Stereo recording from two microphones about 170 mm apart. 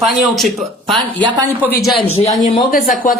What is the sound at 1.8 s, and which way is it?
Speech, centre (ahead or behind).